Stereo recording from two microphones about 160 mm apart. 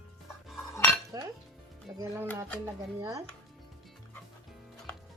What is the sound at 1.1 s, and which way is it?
Dishes, 25° right (ahead or behind).